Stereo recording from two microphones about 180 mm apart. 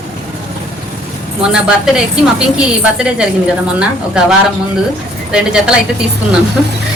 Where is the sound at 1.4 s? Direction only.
5° right (ahead or behind).